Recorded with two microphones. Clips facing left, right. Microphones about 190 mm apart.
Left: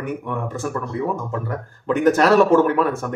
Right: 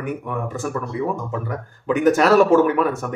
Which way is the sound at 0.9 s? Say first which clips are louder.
Even; 50° left (ahead or behind).